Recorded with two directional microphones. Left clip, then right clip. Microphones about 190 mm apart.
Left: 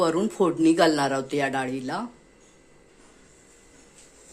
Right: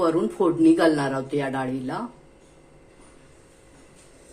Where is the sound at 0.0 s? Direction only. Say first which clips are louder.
Right 1 dB; 35° left (ahead or behind).